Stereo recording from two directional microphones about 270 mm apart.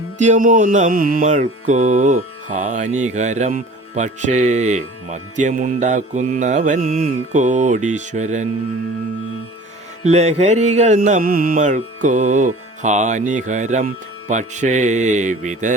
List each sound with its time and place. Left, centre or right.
0.2 s music: right
10.0 s music: right